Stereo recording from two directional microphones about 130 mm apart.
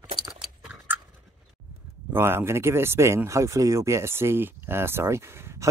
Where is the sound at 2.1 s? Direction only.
20° right (ahead or behind).